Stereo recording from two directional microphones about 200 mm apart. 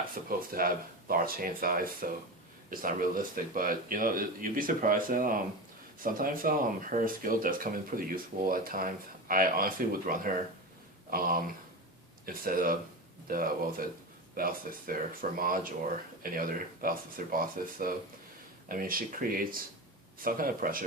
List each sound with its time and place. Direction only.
0.3 s speech: 45° right (ahead or behind)